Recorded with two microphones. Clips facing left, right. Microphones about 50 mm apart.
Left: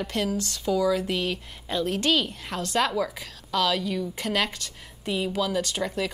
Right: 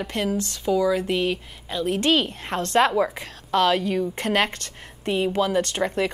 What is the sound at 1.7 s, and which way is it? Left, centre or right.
Speech, centre.